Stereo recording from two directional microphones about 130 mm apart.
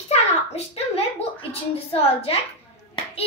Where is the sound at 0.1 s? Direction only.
55° left (ahead or behind).